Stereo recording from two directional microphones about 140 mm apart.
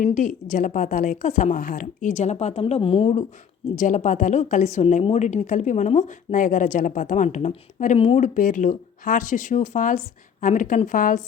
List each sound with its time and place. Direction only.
0.0 s a woman's voice: 65° left (ahead or behind); by 3.2 s 45° left (ahead or behind)
3.8 s a woman's voice: 65° left (ahead or behind)